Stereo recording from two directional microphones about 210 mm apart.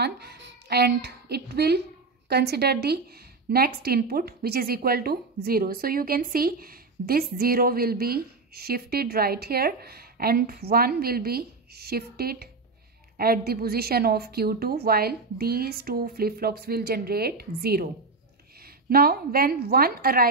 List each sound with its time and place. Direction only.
0.0 s a woman's voice: 50° right (ahead or behind)
18.9 s a woman's voice: 45° right (ahead or behind)